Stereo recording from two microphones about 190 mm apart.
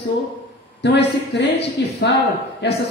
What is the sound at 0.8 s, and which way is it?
Speech, 65° left (ahead or behind).